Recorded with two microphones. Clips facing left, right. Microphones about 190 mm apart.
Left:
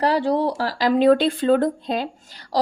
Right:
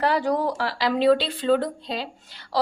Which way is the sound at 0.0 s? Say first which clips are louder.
Left 3 dB; 35° left (ahead or behind).